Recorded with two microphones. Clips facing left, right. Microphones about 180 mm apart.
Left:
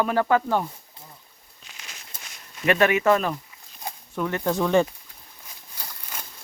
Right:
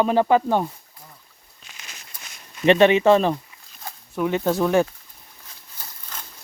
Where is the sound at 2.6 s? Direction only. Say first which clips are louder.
Right 5 dB; 25° right (ahead or behind).